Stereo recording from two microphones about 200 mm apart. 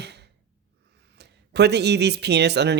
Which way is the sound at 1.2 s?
55° right (ahead or behind).